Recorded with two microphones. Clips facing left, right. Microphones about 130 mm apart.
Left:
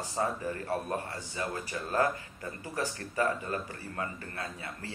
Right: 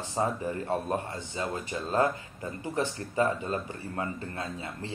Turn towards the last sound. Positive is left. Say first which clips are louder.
# right 4 dB
turn(degrees=-20)  # may be behind; listen again after turning